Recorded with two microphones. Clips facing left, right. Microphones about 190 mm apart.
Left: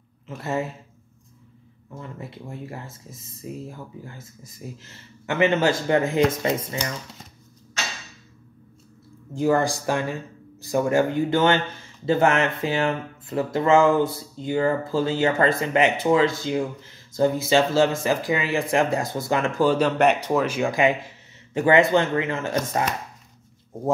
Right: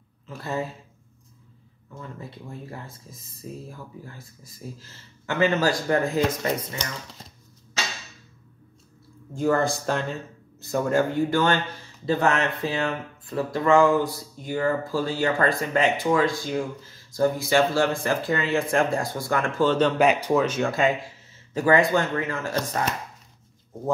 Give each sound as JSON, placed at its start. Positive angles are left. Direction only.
{"t": 0.3, "sound": "speech", "side_deg": 20}
{"t": 2.2, "sound": "speech", "side_deg": 25}
{"t": 4.4, "sound": "speech", "side_deg": 20}
{"t": 9.3, "sound": "speech", "side_deg": 15}
{"t": 20.0, "sound": "speech", "side_deg": 0}
{"t": 20.5, "sound": "speech", "side_deg": 15}